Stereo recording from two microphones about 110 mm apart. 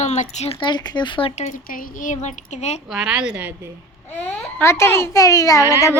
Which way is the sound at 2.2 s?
90° left.